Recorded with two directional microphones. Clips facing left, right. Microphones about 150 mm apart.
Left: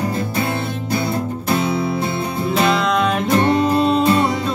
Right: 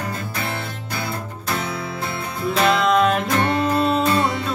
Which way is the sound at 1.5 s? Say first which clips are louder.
Left 7 dB; 20° left (ahead or behind).